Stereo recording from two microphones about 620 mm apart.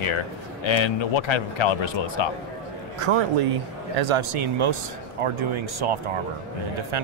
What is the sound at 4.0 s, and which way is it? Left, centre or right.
Speech, right.